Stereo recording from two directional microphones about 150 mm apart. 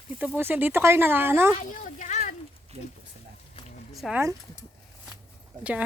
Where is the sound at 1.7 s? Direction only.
60° left (ahead or behind).